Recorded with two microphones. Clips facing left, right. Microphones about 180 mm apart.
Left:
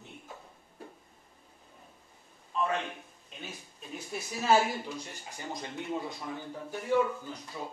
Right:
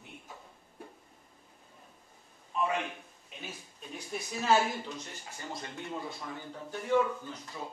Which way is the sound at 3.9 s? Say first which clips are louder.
Even; 5° left (ahead or behind).